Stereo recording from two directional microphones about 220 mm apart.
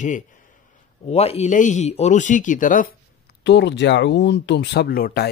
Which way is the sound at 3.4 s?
50° left (ahead or behind).